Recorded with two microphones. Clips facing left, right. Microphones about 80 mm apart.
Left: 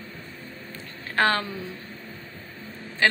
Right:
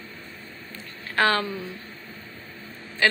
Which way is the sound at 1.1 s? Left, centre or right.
Left.